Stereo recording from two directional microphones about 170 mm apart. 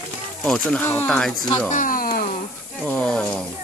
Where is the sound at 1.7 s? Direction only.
50° left (ahead or behind).